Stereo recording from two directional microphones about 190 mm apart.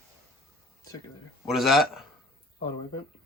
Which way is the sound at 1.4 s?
Centre (ahead or behind).